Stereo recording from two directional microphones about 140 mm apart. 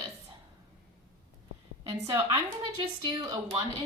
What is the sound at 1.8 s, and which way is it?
A woman's voice, 25° right (ahead or behind).